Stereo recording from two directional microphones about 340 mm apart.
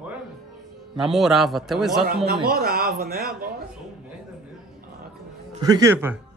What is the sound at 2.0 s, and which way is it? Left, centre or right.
A man's voice, right.